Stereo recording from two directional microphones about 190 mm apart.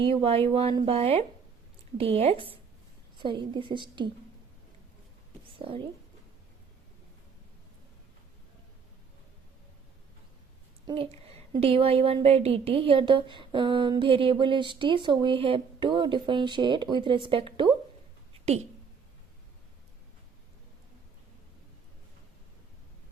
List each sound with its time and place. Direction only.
0.0 s a woman's voice: 30° right (ahead or behind)
5.5 s a woman's voice: 25° right (ahead or behind)
10.8 s a woman's voice: 30° right (ahead or behind)